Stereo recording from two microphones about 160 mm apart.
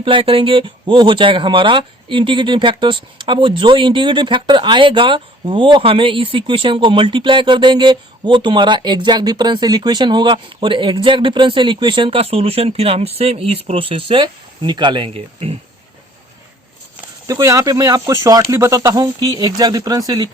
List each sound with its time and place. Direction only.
0.0 s speech: 35° right (ahead or behind)
17.2 s speech: 20° right (ahead or behind)